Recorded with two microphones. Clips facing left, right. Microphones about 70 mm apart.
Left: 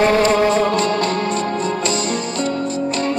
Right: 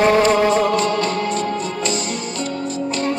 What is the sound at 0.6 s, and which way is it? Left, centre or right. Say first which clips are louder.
Music: even; left.